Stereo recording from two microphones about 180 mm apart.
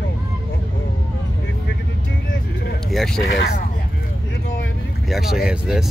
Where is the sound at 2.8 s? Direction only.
Centre (ahead or behind).